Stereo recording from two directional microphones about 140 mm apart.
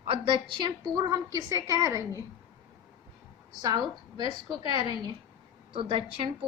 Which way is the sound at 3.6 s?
30° right (ahead or behind).